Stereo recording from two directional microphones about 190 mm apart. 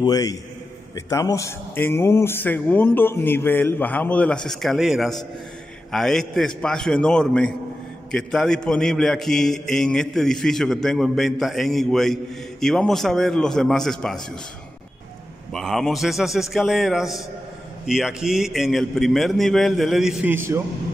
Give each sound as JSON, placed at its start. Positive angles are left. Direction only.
{"t": 0.0, "sound": "a man's voice", "side_deg": 20}
{"t": 15.5, "sound": "a man's voice", "side_deg": 0}